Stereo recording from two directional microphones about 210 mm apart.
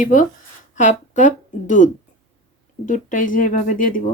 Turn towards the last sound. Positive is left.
turn(degrees=40)  # may be behind; listen again after turning